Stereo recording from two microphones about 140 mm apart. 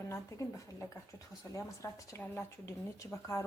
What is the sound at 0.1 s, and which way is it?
Speech, 20° left (ahead or behind).